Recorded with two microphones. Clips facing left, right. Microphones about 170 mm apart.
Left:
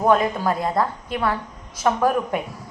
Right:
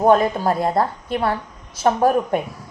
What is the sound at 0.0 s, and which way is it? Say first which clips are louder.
A woman's voice: right 3 dB; 30° right (ahead or behind).